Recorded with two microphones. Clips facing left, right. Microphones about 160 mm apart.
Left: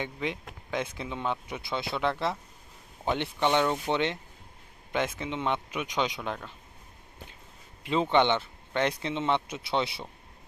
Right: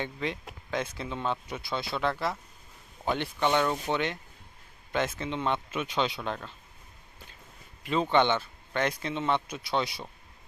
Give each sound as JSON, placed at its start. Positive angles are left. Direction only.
{"t": 0.0, "sound": "speech", "side_deg": 15}
{"t": 8.1, "sound": "speech", "side_deg": 20}